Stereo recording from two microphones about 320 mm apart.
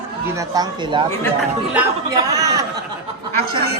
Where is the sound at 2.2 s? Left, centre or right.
Centre.